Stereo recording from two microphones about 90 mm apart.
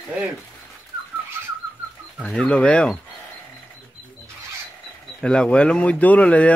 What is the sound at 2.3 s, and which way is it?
Speech, 10° left (ahead or behind).